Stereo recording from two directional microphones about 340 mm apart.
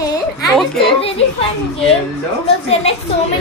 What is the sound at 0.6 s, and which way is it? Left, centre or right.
Speech, centre.